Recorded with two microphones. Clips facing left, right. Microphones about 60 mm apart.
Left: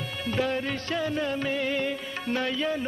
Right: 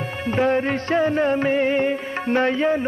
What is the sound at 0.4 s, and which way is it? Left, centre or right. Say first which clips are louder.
Music: right 9 dB; right.